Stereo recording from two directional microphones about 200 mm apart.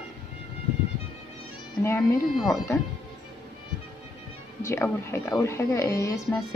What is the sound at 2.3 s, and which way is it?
Speech, centre (ahead or behind).